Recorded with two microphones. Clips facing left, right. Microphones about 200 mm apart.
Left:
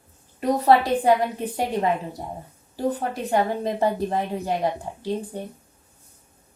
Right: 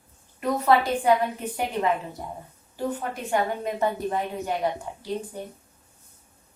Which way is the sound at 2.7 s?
35° left (ahead or behind).